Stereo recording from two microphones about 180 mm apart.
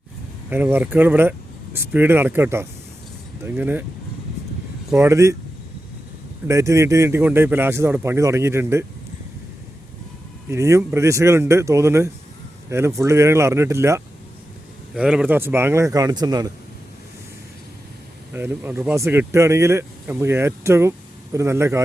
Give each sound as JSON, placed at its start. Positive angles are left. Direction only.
{"t": 0.5, "sound": "speech", "side_deg": -10}
{"t": 4.9, "sound": "speech", "side_deg": -15}
{"t": 6.5, "sound": "speech", "side_deg": -15}
{"t": 10.5, "sound": "speech", "side_deg": -15}
{"t": 14.9, "sound": "speech", "side_deg": -5}
{"t": 18.3, "sound": "speech", "side_deg": -10}